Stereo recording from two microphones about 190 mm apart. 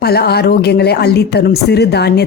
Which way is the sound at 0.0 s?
55° left (ahead or behind).